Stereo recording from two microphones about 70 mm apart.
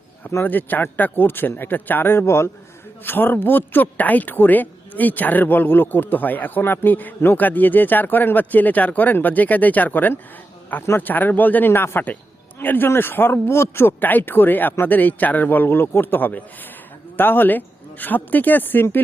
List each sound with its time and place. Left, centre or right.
0.4 s speech: left
3.0 s speech: left